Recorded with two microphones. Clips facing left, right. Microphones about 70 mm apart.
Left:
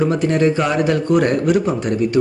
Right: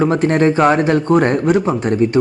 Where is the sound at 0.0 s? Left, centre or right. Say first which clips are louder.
Right 2 dB; right.